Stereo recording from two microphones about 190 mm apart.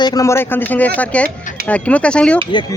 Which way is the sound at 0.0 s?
20° left (ahead or behind).